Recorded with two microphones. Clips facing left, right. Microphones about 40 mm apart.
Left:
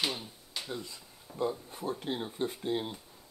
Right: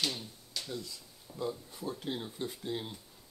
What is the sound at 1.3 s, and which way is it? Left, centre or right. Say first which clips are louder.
Speech: left 4 dB; left.